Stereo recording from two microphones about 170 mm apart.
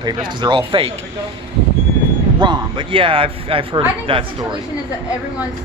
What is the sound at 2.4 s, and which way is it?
Speech, 25° right (ahead or behind).